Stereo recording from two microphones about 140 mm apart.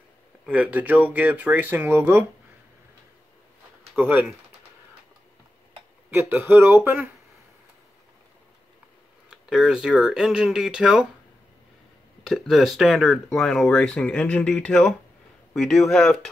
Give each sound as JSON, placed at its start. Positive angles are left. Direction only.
{"t": 0.5, "sound": "speech", "side_deg": -10}
{"t": 6.0, "sound": "speech", "side_deg": -15}
{"t": 9.3, "sound": "speech", "side_deg": -5}
{"t": 12.2, "sound": "speech", "side_deg": 0}